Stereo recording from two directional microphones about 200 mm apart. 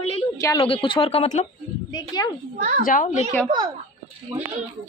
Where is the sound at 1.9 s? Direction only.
20° left (ahead or behind).